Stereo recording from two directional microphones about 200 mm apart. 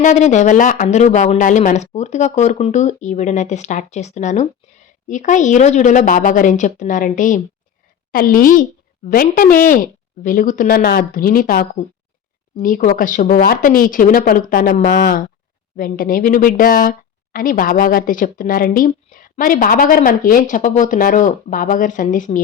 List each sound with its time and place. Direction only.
0.0 s a woman's voice: 35° left (ahead or behind)